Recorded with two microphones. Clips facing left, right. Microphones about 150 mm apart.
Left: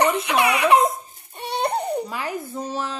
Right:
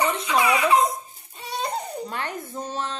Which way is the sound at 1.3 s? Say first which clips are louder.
Left 5 dB; 65° left (ahead or behind).